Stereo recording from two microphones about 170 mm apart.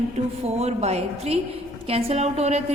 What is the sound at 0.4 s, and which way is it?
A woman's voice, 40° right (ahead or behind).